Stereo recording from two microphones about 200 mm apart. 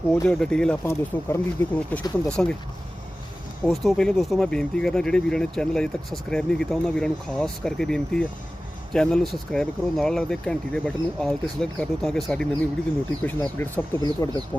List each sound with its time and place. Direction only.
0.1 s speech: 5° left (ahead or behind)
3.7 s speech: centre (ahead or behind); by 14.4 s 15° left (ahead or behind)